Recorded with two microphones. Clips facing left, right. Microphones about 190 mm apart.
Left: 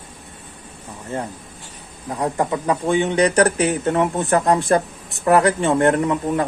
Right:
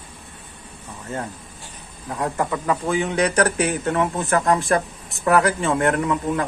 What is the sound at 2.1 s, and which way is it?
Speech, 20° left (ahead or behind).